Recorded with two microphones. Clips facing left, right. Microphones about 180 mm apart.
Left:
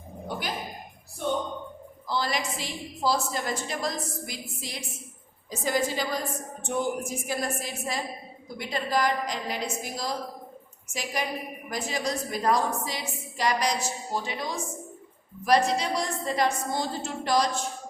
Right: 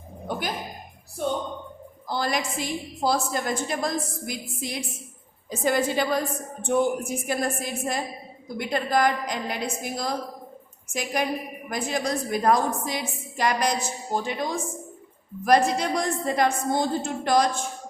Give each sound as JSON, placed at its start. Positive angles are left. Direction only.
{"t": 2.0, "sound": "a woman's voice", "side_deg": -50}